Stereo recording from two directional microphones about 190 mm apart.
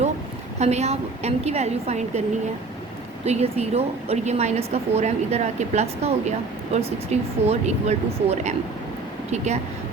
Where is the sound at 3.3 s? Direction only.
35° right (ahead or behind).